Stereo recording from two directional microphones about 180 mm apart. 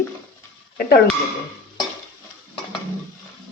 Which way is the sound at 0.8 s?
55° left (ahead or behind).